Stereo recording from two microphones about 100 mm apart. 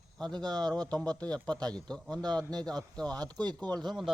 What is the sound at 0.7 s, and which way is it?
A man's voice, 10° left (ahead or behind).